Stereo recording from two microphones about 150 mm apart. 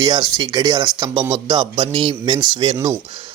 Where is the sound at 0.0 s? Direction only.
25° right (ahead or behind).